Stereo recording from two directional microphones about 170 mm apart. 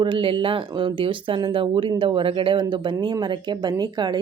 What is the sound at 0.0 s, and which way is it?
A woman's voice, 30° right (ahead or behind).